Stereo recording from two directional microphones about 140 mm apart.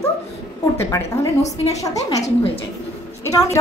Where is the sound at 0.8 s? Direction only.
20° left (ahead or behind).